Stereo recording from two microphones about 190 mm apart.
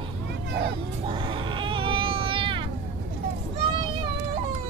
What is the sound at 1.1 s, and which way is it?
Baby cry, 25° right (ahead or behind).